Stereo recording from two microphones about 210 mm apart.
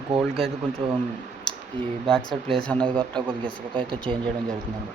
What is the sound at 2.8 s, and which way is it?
Speech, 20° right (ahead or behind).